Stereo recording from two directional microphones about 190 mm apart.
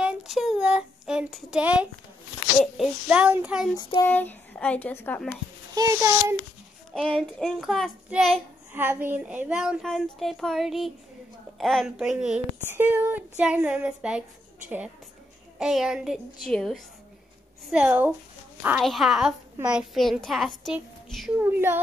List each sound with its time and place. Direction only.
0.0 s child singing: 5° right (ahead or behind)
2.6 s a woman's voice: 5° right (ahead or behind)
3.7 s child singing: 20° left (ahead or behind)
4.1 s speech: 10° left (ahead or behind)
5.8 s a child's voice: 15° right (ahead or behind)
6.9 s child singing: centre (ahead or behind)
8.8 s a woman's voice: 10° right (ahead or behind)
15.6 s a woman's voice: 5° right (ahead or behind)
21.4 s a child's voice: 10° right (ahead or behind)